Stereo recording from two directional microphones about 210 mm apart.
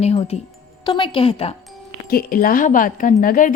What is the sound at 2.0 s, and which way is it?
Speech, 45° left (ahead or behind).